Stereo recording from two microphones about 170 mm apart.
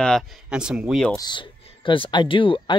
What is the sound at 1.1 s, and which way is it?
Speech, 25° left (ahead or behind).